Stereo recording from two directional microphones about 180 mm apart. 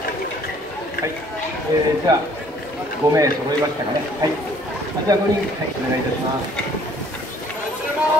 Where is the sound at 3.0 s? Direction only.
20° right (ahead or behind).